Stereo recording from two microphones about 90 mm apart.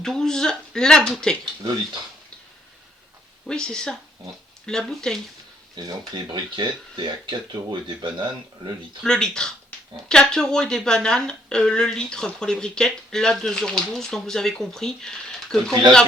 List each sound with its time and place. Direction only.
0.0 s speech: 5° left (ahead or behind)
1.6 s speech: 50° right (ahead or behind)
3.4 s speech: 10° left (ahead or behind)
6.3 s speech: 60° right (ahead or behind)
9.0 s speech: 10° left (ahead or behind)